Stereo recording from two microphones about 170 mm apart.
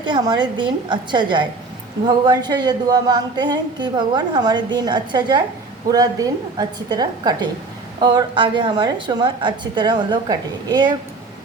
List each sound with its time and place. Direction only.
0.0 s a woman's voice: 25° right (ahead or behind)